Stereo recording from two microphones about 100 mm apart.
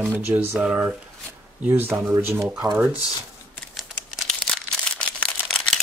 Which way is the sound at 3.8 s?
Centre (ahead or behind).